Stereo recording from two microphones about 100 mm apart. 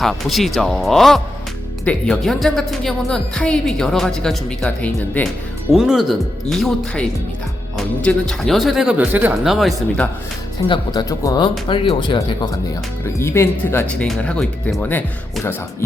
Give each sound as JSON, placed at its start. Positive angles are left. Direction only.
{"t": 0.0, "sound": "a woman's voice", "side_deg": 0}
{"t": 5.7, "sound": "a woman's voice", "side_deg": -5}
{"t": 9.0, "sound": "speech", "side_deg": -15}
{"t": 9.4, "sound": "a woman's voice", "side_deg": 0}
{"t": 10.6, "sound": "speech", "side_deg": 50}
{"t": 11.2, "sound": "speech", "side_deg": 35}
{"t": 11.7, "sound": "speech", "side_deg": 60}
{"t": 13.1, "sound": "speech", "side_deg": 25}
{"t": 13.8, "sound": "speech", "side_deg": 10}